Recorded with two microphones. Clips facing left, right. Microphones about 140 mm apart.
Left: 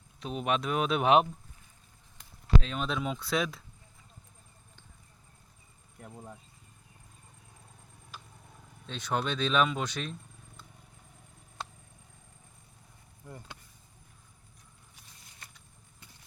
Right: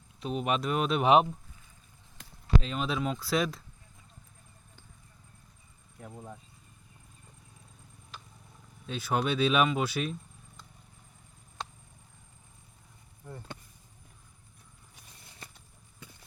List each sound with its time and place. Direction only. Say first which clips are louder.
0.2 s speech: right 1 dB; centre (ahead or behind)
2.6 s speech: right 2 dB; centre (ahead or behind)
8.9 s speech: right 3 dB; 5° right (ahead or behind)
11.6 s a sound: right 1 dB; 5° left (ahead or behind)